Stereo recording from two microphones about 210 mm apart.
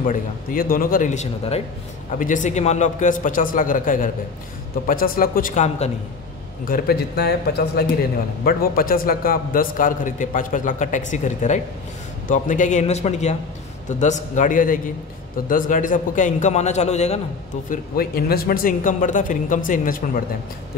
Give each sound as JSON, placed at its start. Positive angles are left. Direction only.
{"t": 0.0, "sound": "a man's voice", "side_deg": 40}
{"t": 6.7, "sound": "a man's voice", "side_deg": 50}
{"t": 17.6, "sound": "a man's voice", "side_deg": 45}